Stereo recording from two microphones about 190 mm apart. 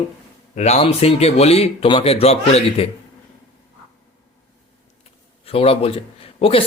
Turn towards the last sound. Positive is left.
turn(degrees=30)  # may be behind; listen again after turning